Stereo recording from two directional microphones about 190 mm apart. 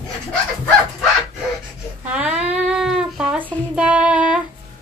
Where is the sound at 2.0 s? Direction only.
5° right (ahead or behind).